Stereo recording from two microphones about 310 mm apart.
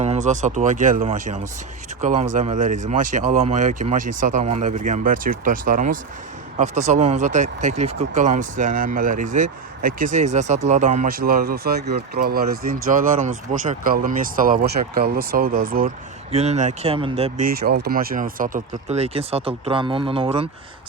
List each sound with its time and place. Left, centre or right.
0.0 s speech: right
17.4 s speech: right